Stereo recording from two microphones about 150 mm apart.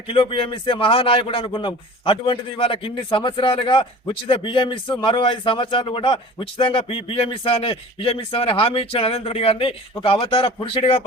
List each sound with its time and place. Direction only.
0.1 s a man's voice: 35° left (ahead or behind)